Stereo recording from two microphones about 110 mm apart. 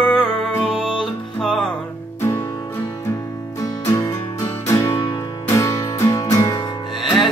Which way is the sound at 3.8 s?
25° left (ahead or behind).